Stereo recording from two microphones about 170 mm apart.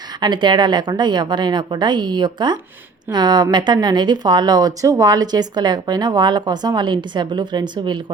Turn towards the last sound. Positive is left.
turn(degrees=-25)  # may be behind; listen again after turning